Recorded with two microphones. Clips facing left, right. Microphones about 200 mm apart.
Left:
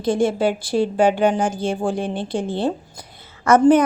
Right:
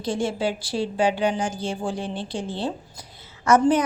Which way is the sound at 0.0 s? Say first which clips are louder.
Left 6 dB; 55° left (ahead or behind).